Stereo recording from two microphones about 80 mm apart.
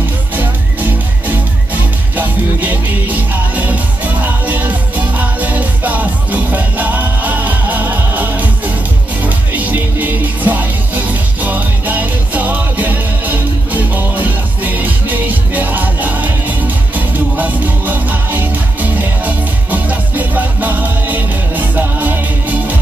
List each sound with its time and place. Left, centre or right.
2.1 s music: right